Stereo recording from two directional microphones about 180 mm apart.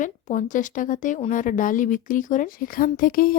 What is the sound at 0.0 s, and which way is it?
Speech, 45° left (ahead or behind).